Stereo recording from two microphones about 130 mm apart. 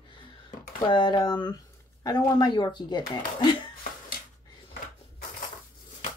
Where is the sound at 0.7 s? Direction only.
35° left (ahead or behind).